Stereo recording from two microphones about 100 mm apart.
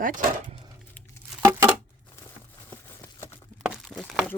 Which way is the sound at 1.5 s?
30° right (ahead or behind).